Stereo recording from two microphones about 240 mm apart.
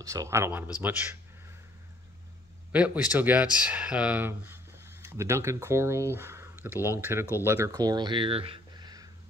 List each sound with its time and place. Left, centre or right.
0.0 s speech: centre
2.7 s speech: centre